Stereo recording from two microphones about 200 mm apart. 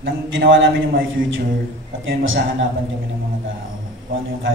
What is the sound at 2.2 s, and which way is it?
Speech, 70° right (ahead or behind).